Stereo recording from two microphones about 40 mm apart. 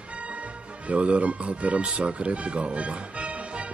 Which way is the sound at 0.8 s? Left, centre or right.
Right.